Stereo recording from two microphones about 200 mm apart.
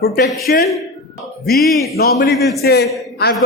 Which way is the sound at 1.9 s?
50° left (ahead or behind).